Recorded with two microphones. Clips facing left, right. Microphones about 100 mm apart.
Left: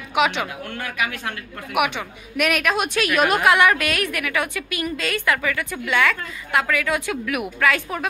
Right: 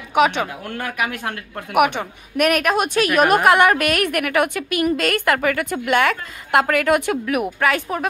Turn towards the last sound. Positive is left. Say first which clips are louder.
# right 2 dB
turn(degrees=-35)  # may be behind; listen again after turning